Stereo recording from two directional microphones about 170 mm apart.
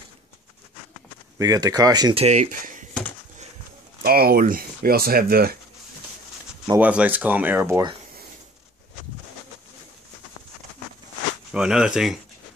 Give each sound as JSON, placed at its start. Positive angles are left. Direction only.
{"t": 1.4, "sound": "speech", "side_deg": -20}
{"t": 2.1, "sound": "speech", "side_deg": -40}
{"t": 4.0, "sound": "speech", "side_deg": -60}
{"t": 6.8, "sound": "speech", "side_deg": -10}
{"t": 11.5, "sound": "speech", "side_deg": -5}